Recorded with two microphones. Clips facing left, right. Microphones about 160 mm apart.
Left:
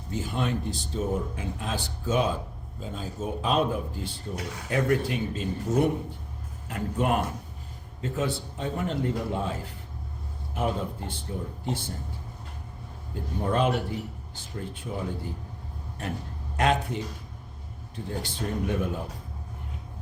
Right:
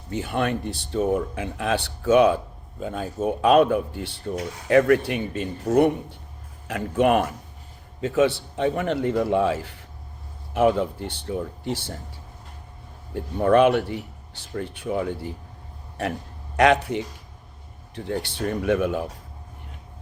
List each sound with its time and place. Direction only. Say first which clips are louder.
0.1 s speech: right 4 dB; 65° right (ahead or behind)
6.7 s speech: right 7 dB; 90° right
13.4 s speech: right 9 dB; 70° right (ahead or behind)